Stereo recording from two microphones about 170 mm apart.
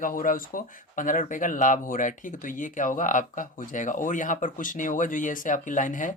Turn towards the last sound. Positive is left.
turn(degrees=50)  # may be behind; listen again after turning